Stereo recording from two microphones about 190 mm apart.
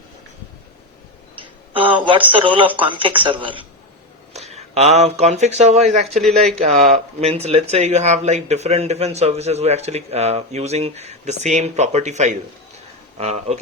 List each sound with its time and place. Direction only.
1.7 s speech: 25° right (ahead or behind)
6.1 s speech: centre (ahead or behind)
6.9 s speech: 35° right (ahead or behind)